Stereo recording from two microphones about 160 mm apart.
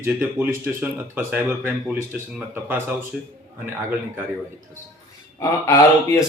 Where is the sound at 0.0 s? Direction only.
10° right (ahead or behind).